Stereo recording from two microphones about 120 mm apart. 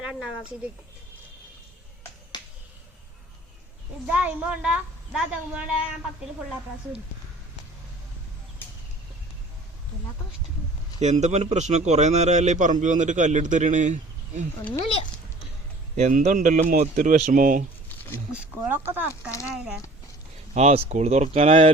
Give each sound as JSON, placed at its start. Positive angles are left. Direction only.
{"t": 0.0, "sound": "speech", "side_deg": -5}
{"t": 2.3, "sound": "finger snapping", "side_deg": 40}
{"t": 4.0, "sound": "a woman's voice", "side_deg": -10}
{"t": 11.0, "sound": "a man's voice", "side_deg": -75}
{"t": 16.0, "sound": "a man's voice", "side_deg": -80}
{"t": 18.3, "sound": "a woman's voice", "side_deg": -10}
{"t": 20.5, "sound": "speech", "side_deg": -60}